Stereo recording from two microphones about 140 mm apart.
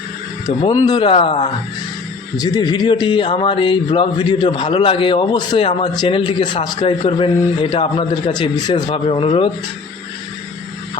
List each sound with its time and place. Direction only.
0.6 s speech: 30° left (ahead or behind)
2.4 s speech: 30° left (ahead or behind)
9.0 s speech: 45° left (ahead or behind)